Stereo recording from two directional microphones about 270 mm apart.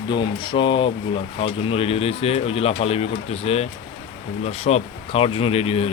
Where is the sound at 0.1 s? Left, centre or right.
Centre.